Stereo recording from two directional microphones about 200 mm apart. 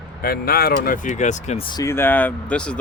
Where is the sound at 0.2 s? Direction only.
50° left (ahead or behind).